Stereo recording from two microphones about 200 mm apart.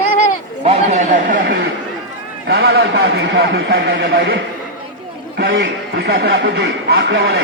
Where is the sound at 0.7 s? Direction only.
40° right (ahead or behind).